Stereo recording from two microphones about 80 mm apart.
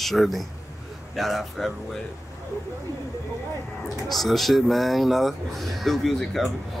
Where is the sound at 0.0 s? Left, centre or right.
Centre.